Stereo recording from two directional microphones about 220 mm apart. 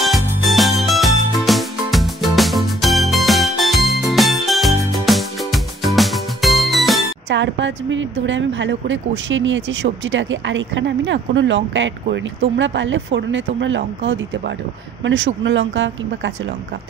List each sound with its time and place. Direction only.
0.0 s music: centre (ahead or behind)
7.2 s a woman's voice: 55° right (ahead or behind)